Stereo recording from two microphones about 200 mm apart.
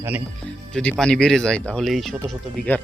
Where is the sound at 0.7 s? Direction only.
5° left (ahead or behind).